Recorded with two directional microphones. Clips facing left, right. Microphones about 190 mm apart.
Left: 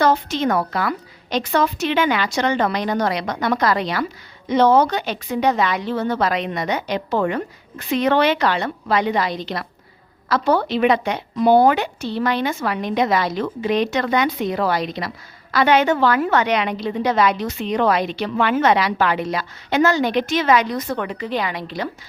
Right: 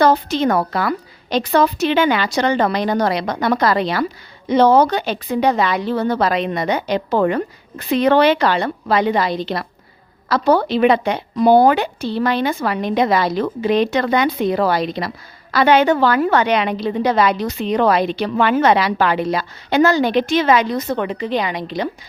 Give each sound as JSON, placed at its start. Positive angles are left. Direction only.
{"t": 0.0, "sound": "a woman's voice", "side_deg": -35}